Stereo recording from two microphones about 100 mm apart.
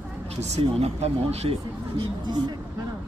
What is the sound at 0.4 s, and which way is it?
Speech, 90° right.